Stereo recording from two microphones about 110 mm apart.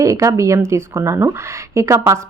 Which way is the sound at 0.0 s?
30° right (ahead or behind).